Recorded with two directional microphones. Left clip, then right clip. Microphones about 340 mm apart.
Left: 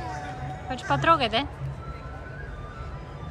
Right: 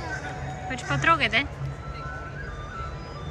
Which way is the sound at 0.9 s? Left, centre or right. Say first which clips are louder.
Even; centre.